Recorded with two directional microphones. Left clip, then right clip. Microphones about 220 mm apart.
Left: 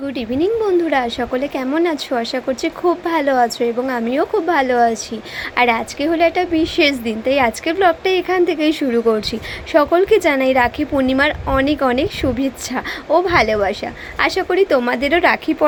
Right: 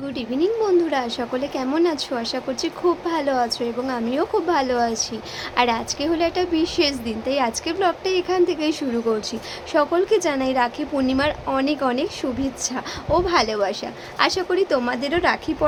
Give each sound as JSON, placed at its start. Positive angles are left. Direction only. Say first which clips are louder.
{"t": 0.2, "sound": "a woman's voice", "louder": "left 3 dB", "side_deg": 15}